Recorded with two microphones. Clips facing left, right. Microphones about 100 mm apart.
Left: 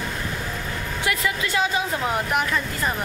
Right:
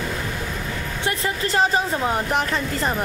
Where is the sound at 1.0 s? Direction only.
35° right (ahead or behind).